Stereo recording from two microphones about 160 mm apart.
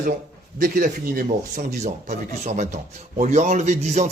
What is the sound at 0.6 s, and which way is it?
Speech, 65° right (ahead or behind).